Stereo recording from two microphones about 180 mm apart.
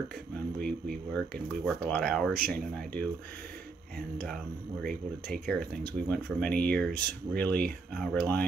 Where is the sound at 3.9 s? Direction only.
5° left (ahead or behind).